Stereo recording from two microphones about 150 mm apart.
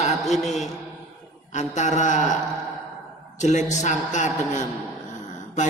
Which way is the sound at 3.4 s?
50° left (ahead or behind).